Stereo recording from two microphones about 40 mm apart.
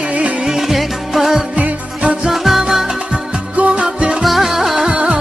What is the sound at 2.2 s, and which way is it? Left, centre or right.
Music, centre.